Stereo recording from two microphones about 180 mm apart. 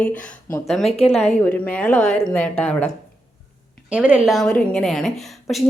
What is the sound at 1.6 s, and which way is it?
Speech, 10° left (ahead or behind).